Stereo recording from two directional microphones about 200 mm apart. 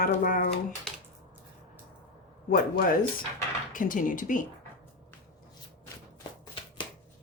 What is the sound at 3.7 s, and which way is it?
Speech, 40° left (ahead or behind).